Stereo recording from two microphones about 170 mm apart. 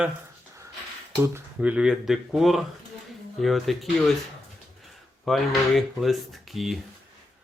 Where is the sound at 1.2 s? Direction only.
10° right (ahead or behind).